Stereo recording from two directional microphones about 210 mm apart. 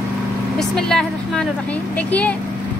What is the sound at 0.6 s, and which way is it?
A woman's voice, centre (ahead or behind).